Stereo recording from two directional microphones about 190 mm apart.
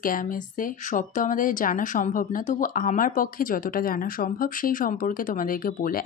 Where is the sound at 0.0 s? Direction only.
45° left (ahead or behind).